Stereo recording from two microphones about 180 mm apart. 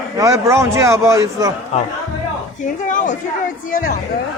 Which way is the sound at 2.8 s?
45° left (ahead or behind).